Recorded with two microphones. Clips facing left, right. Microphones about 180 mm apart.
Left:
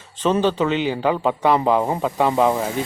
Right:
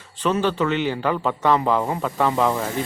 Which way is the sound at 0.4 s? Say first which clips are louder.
Left 2 dB; 20° left (ahead or behind).